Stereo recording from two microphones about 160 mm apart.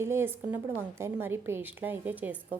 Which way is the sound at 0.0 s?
15° right (ahead or behind).